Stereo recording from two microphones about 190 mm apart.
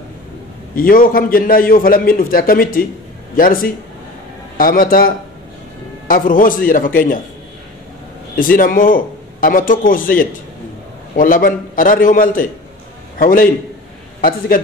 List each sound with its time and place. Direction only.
0.7 s a man's voice: 50° left (ahead or behind)
8.4 s a man's voice: 45° left (ahead or behind)
14.5 s a man's voice: 45° left (ahead or behind)